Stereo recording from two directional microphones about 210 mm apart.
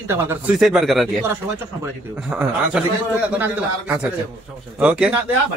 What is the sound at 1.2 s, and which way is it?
A man's voice, 10° right (ahead or behind).